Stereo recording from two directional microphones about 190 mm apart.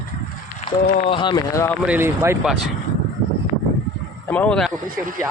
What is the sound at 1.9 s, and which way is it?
Speech, 10° right (ahead or behind).